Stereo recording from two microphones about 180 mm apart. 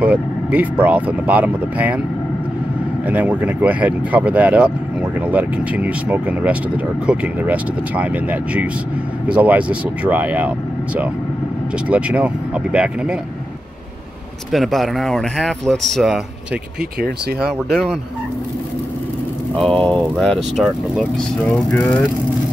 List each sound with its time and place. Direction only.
0.0 s speech: 5° right (ahead or behind)
3.1 s speech: 10° right (ahead or behind)
11.9 s speech: 10° right (ahead or behind)
14.5 s speech: centre (ahead or behind)
17.4 s speech: 5° right (ahead or behind)
19.5 s speech: 5° left (ahead or behind)